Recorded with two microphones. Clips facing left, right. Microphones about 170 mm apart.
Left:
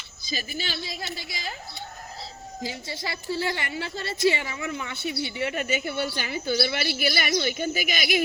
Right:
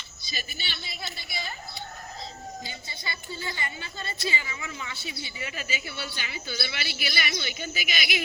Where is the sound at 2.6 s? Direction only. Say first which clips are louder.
Left 7 dB; 90° left.